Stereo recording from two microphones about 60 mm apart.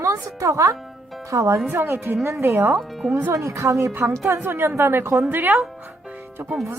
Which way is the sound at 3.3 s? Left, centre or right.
Right.